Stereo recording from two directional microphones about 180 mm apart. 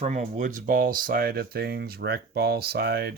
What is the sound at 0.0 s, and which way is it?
Speech, 40° right (ahead or behind).